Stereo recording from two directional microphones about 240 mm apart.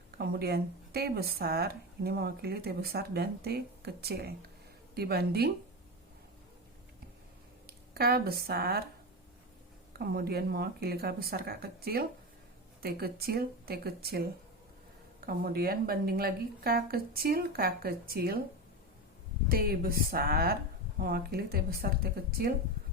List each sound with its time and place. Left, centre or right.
0.2 s speech: right
7.7 s speech: right
10.0 s speech: right
19.5 s speech: right